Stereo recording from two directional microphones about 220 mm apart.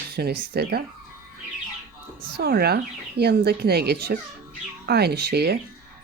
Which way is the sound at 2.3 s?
45° right (ahead or behind).